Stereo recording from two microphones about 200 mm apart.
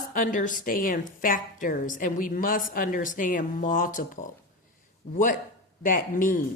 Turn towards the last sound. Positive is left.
turn(degrees=45)  # may be behind; listen again after turning